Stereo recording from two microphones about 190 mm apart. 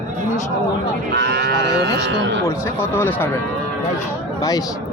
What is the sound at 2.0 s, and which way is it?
Speech, 70° right (ahead or behind).